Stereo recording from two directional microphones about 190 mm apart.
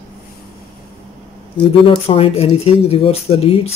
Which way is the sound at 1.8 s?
30° left (ahead or behind).